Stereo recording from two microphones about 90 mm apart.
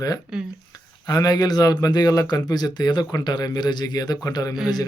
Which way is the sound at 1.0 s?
45° left (ahead or behind).